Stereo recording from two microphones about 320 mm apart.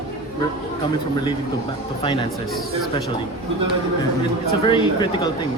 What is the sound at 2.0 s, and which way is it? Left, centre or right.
Speech, centre.